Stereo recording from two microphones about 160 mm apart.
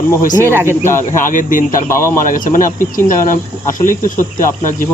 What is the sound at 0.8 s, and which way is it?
Speech, 15° left (ahead or behind).